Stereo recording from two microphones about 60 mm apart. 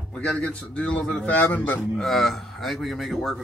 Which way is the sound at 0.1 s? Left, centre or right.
Left.